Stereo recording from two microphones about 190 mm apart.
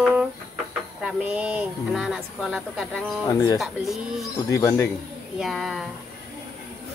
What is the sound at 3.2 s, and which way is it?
Speech, 20° left (ahead or behind).